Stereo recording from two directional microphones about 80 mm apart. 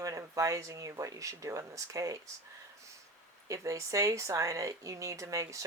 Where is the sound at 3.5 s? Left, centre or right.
Right.